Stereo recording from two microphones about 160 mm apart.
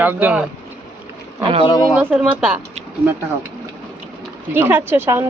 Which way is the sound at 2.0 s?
10° right (ahead or behind).